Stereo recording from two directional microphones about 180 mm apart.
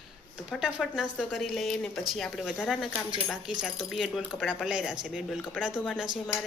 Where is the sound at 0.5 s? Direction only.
Centre (ahead or behind).